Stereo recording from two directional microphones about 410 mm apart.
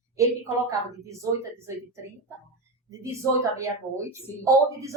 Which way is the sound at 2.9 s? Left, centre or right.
Centre.